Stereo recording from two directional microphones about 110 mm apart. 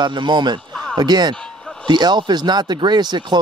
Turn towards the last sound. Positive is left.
turn(degrees=-40)  # may be behind; listen again after turning